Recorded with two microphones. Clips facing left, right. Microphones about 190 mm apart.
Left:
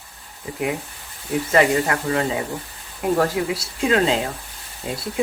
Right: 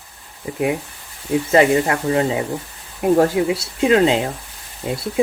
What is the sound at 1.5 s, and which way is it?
Speech, 25° right (ahead or behind).